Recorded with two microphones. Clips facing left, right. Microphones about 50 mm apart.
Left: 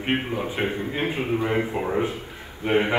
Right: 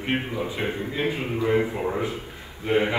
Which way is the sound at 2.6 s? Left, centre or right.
Left.